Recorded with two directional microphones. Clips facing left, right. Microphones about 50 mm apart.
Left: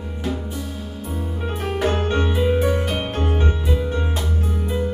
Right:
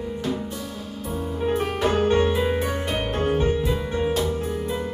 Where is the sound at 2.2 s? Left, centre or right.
Centre.